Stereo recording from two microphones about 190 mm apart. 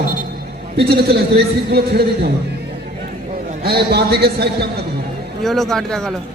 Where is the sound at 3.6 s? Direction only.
55° right (ahead or behind).